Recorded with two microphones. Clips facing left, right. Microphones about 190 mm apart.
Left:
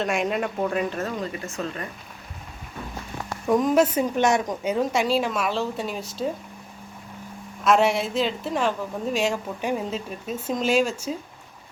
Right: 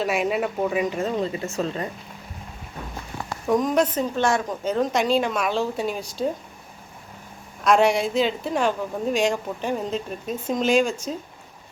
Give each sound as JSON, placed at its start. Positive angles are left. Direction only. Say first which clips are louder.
{"t": 0.0, "sound": "speech", "louder": "right 1 dB", "side_deg": -5}
{"t": 1.1, "sound": "speech", "louder": "right 5 dB", "side_deg": -25}
{"t": 3.4, "sound": "speech", "louder": "left 1 dB", "side_deg": 0}
{"t": 7.6, "sound": "speech", "louder": "right 1 dB", "side_deg": 0}